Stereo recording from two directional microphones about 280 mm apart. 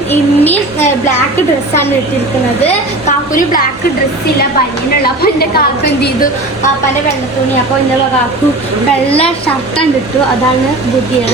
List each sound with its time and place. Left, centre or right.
0.1 s speech: centre
5.2 s a woman's voice: left